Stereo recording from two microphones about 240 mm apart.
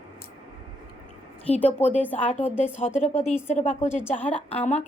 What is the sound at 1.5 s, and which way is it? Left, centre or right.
Speech, left.